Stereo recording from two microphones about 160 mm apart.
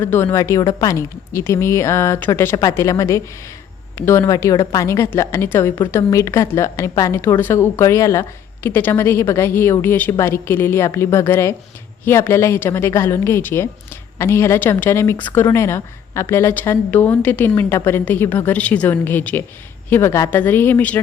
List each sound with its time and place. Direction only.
0.0 s a woman's voice: 15° left (ahead or behind)